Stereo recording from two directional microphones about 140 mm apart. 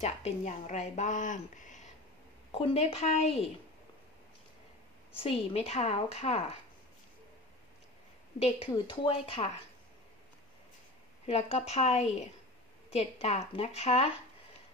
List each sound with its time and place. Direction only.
0.0 s a woman's voice: 55° left (ahead or behind)
2.5 s a woman's voice: 45° left (ahead or behind)
5.2 s a woman's voice: 45° left (ahead or behind)
8.4 s a woman's voice: 50° left (ahead or behind)
8.6 s speech: 35° left (ahead or behind)
11.2 s a woman's voice: 45° left (ahead or behind)